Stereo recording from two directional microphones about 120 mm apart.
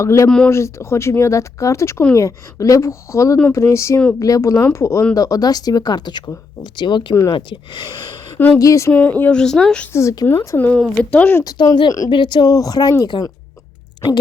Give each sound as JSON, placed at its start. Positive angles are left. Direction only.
{"t": 0.0, "sound": "speech", "side_deg": 25}
{"t": 0.3, "sound": "speech", "side_deg": 5}
{"t": 0.5, "sound": "speech", "side_deg": 25}
{"t": 8.9, "sound": "speech", "side_deg": 15}
{"t": 9.9, "sound": "speech", "side_deg": 25}
{"t": 11.4, "sound": "speech", "side_deg": 35}